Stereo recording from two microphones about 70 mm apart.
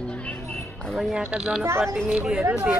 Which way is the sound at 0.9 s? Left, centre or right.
Centre.